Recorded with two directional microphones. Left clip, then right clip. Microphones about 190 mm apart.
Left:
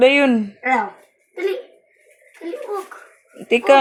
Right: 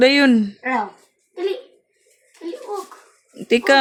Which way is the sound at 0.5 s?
Centre (ahead or behind).